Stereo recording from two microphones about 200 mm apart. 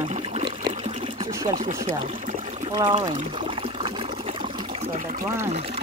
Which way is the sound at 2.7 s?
25° right (ahead or behind).